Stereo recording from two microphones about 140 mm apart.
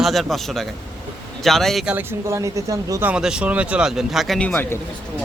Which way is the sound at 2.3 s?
20° right (ahead or behind).